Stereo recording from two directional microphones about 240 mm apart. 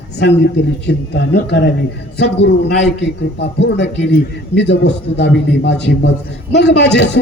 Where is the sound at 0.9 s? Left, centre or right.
Left.